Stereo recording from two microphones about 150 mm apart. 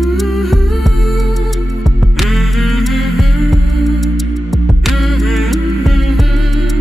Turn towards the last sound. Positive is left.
turn(degrees=0)  # may be behind; listen again after turning